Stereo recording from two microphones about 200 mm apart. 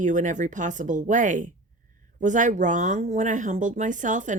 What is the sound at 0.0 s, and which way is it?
Speech, 40° right (ahead or behind).